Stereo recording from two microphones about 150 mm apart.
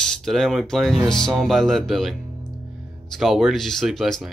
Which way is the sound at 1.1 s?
5° left (ahead or behind).